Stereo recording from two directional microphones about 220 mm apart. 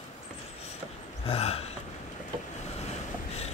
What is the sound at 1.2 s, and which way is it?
Gasp, 25° left (ahead or behind).